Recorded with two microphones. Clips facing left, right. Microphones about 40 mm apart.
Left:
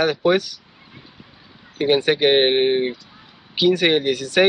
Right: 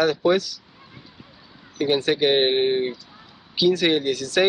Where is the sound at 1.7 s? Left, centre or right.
Left.